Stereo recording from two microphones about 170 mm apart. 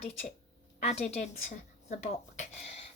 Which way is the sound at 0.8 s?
40° left (ahead or behind).